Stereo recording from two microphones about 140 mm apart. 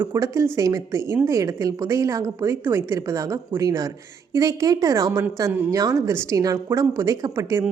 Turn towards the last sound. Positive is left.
turn(degrees=-20)  # may be behind; listen again after turning